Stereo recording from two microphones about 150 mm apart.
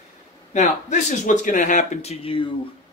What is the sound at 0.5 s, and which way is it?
Speech, 55° left (ahead or behind).